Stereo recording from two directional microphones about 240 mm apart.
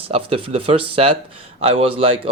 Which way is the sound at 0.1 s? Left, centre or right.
Right.